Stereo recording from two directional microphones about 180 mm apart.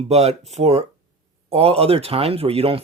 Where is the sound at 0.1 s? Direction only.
35° right (ahead or behind).